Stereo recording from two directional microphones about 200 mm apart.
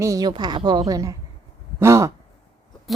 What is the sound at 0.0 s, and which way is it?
A woman's voice, 15° right (ahead or behind).